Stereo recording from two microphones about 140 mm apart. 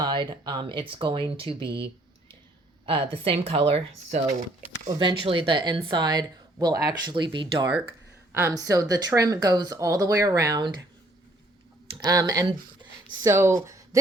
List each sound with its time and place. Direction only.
0.0 s speech: 35° right (ahead or behind)
8.3 s speech: 20° right (ahead or behind)
11.9 s speech: 30° right (ahead or behind)